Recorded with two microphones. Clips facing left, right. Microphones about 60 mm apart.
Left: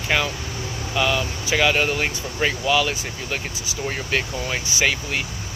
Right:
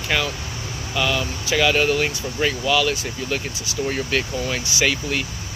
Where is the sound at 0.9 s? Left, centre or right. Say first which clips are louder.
Left 1 dB; centre.